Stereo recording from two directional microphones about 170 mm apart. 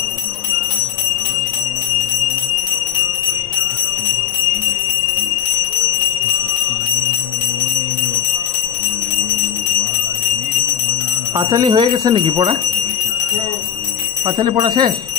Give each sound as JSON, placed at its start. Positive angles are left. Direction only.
{"t": 11.3, "sound": "speech", "side_deg": -25}
{"t": 14.2, "sound": "speech", "side_deg": -30}